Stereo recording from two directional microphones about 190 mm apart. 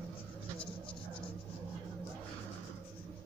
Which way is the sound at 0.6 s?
5° left (ahead or behind).